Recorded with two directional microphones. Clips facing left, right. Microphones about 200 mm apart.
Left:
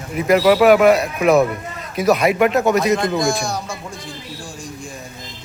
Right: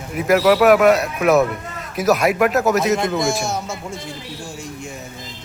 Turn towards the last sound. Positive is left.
turn(degrees=-25)  # may be behind; listen again after turning